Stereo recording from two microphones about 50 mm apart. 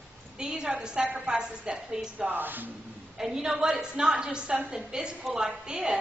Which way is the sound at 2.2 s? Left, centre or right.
Right.